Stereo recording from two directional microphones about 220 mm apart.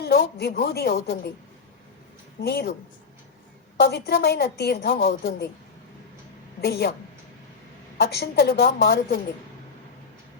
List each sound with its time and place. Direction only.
0.0 s a woman's voice: 45° left (ahead or behind)
2.4 s a woman's voice: 45° left (ahead or behind)
3.8 s a woman's voice: 45° left (ahead or behind)
6.6 s a woman's voice: 45° left (ahead or behind)
8.0 s a woman's voice: 45° left (ahead or behind)